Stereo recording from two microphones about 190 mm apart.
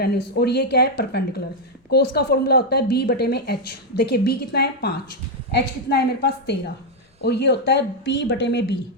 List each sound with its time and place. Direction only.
0.0 s a woman's voice: 55° left (ahead or behind)